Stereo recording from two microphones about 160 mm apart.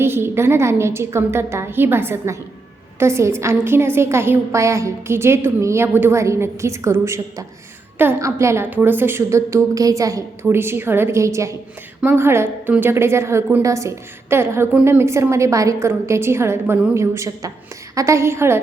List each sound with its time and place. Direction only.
0.0 s a woman's voice: 15° right (ahead or behind)